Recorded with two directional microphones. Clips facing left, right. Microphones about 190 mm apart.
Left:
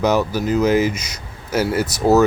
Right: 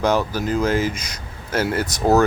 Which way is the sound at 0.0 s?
10° left (ahead or behind).